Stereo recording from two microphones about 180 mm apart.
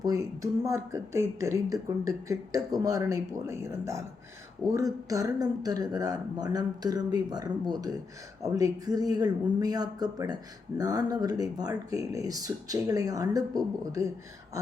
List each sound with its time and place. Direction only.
0.0 s speech: 20° right (ahead or behind)